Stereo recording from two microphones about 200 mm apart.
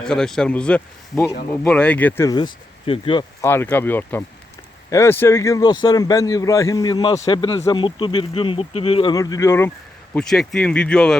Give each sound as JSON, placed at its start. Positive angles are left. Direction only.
{"t": 0.0, "sound": "a man's voice", "side_deg": 5}
{"t": 3.4, "sound": "a man's voice", "side_deg": 10}